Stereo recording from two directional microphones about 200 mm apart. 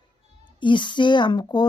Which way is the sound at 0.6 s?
25° left (ahead or behind).